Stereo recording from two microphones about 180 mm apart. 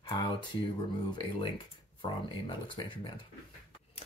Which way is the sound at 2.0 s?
25° left (ahead or behind).